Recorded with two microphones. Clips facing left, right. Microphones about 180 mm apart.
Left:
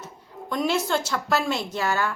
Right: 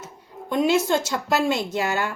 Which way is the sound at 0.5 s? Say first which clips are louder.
Right 4 dB; 20° right (ahead or behind).